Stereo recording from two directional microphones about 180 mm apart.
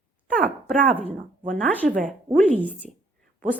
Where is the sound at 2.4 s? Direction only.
10° left (ahead or behind).